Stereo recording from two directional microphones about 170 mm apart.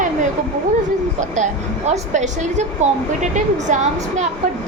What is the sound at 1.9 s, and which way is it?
A woman's voice, 45° right (ahead or behind).